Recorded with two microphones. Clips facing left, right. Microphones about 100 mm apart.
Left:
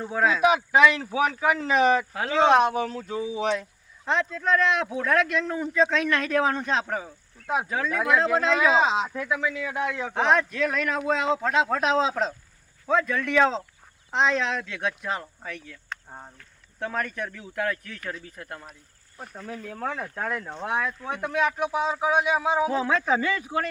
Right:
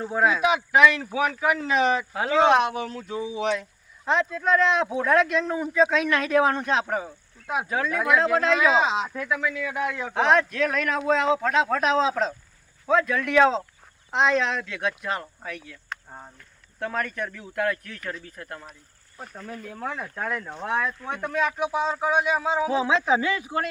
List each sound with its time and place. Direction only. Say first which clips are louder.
0.0 s speech: right 1 dB; 10° right (ahead or behind)
0.4 s speech: left 1 dB; 35° left (ahead or behind)
4.0 s speech: right 2 dB; 15° right (ahead or behind)
4.6 s speech: right 2 dB; 25° right (ahead or behind); by 8.3 s 5° right (ahead or behind)
8.8 s speech: left 1 dB; 35° left (ahead or behind)
9.2 s a man's voice: even; 20° left (ahead or behind)
10.2 s speech: right 2 dB; centre (ahead or behind); by 12.3 s 15° left (ahead or behind)
12.9 s speech: right 2 dB; centre (ahead or behind)
16.0 s speech: even; 10° left (ahead or behind)
19.8 s speech: left 1 dB; 40° left (ahead or behind)
20.4 s a man's voice: right 1 dB; 20° left (ahead or behind)
21.0 s speech: left 1 dB; 10° left (ahead or behind)
22.7 s speech: right 2 dB; 15° right (ahead or behind)
23.2 s speech: even; 5° right (ahead or behind)